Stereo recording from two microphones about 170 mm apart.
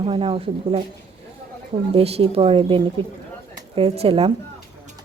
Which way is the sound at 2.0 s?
35° right (ahead or behind).